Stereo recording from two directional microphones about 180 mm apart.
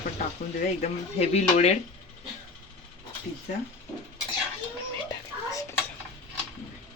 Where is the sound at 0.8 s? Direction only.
35° left (ahead or behind).